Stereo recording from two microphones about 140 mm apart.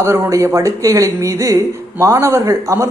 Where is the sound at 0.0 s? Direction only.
20° right (ahead or behind).